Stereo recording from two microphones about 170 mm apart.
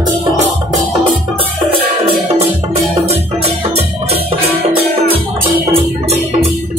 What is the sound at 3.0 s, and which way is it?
Music, 40° right (ahead or behind).